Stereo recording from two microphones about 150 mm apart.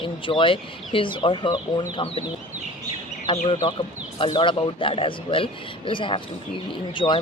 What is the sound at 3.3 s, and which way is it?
Speech, 35° left (ahead or behind).